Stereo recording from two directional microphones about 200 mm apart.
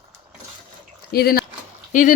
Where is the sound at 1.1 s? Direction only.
50° left (ahead or behind).